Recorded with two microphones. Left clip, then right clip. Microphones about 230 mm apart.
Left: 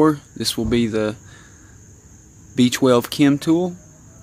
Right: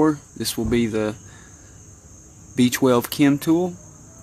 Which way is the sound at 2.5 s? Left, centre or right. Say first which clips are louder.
Left 2 dB; centre.